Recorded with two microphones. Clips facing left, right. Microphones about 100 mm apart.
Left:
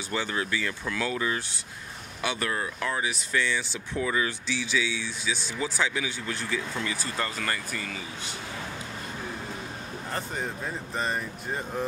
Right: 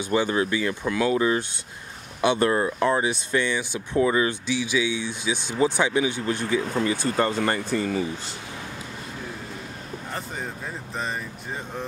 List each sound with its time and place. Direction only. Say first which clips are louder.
0.0 s speech: right 8 dB; 20° right (ahead or behind)
10.1 s speech: left 1 dB; centre (ahead or behind)